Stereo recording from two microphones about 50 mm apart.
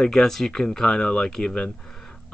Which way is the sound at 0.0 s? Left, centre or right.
Centre.